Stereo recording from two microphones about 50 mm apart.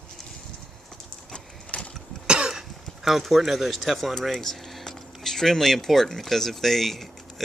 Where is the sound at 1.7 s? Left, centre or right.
Left.